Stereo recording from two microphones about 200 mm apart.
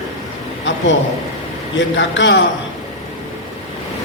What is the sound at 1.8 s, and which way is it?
Speech, 65° left (ahead or behind).